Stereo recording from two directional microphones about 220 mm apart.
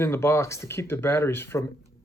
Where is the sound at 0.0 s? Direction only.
10° left (ahead or behind).